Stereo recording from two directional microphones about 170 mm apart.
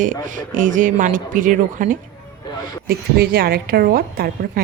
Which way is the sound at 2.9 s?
65° right (ahead or behind).